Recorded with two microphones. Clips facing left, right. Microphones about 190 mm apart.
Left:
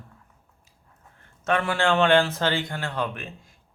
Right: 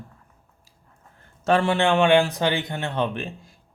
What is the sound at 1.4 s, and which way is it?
A man's voice, 30° right (ahead or behind).